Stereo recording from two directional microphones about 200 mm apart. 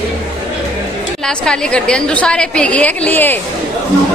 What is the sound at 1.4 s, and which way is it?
A woman's voice, 5° left (ahead or behind).